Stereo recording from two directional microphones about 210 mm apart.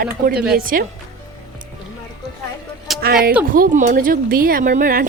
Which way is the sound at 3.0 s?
45° right (ahead or behind).